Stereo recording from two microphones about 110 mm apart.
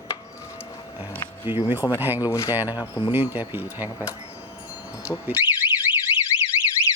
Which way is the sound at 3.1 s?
15° right (ahead or behind).